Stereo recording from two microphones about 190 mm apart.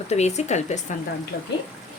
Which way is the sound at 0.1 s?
35° left (ahead or behind).